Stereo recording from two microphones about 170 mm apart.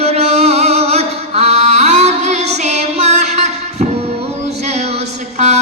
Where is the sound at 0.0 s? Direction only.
40° right (ahead or behind).